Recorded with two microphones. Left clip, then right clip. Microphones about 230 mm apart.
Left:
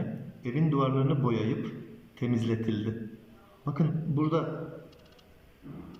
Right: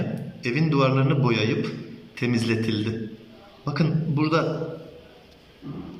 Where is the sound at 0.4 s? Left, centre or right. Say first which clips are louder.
Right 7 dB; right.